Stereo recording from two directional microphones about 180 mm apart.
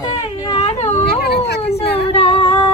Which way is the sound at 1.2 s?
65° left (ahead or behind).